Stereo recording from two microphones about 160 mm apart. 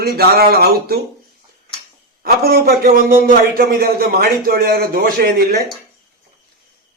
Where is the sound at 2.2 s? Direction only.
70° right (ahead or behind).